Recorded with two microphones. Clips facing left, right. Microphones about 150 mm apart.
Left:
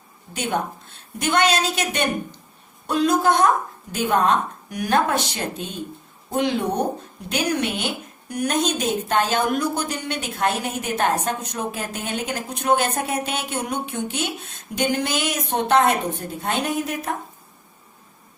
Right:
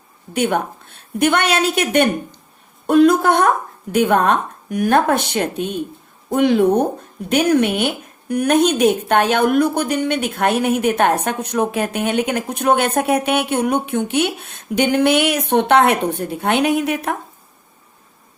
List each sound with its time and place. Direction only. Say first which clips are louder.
0.3 s a woman's voice: right 6 dB; 60° right (ahead or behind)